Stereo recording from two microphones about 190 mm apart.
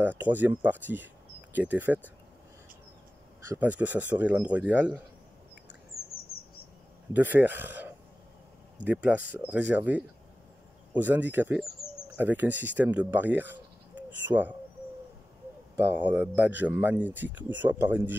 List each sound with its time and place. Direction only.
0.0 s speech: 10° right (ahead or behind)
3.4 s speech: 10° right (ahead or behind)
5.9 s bird: 55° left (ahead or behind)
7.2 s speech: 10° right (ahead or behind)
15.7 s speech: 10° right (ahead or behind)